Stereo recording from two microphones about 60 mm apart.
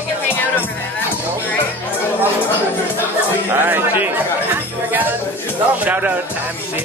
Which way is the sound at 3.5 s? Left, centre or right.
Right.